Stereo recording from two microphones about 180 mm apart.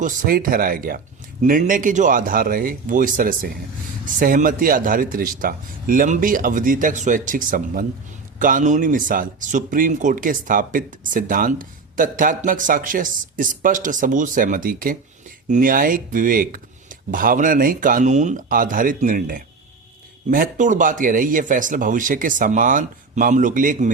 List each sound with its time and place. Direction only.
0.0 s a man's voice: 50° right (ahead or behind)